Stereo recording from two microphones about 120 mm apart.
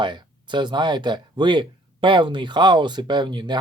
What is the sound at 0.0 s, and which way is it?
Speech, 40° right (ahead or behind).